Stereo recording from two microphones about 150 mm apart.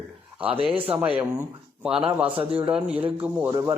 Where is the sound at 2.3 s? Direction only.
40° right (ahead or behind).